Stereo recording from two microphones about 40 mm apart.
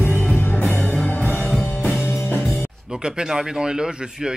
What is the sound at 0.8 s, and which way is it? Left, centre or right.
Music, left.